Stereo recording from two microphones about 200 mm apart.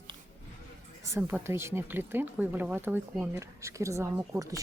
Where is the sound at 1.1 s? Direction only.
15° right (ahead or behind).